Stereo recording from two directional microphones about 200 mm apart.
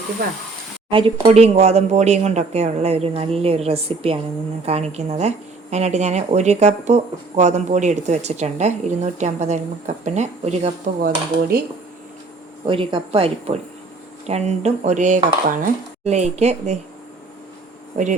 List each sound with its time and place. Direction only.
0.9 s speech: 25° right (ahead or behind)
12.6 s speech: 25° right (ahead or behind)